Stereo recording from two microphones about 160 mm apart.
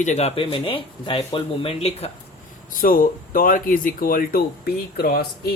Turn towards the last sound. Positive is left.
turn(degrees=75)  # may be behind; listen again after turning